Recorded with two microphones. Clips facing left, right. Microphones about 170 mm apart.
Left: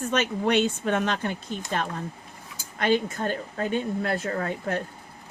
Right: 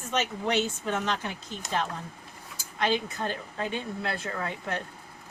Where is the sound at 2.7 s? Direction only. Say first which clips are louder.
Left 4 dB; 55° left (ahead or behind).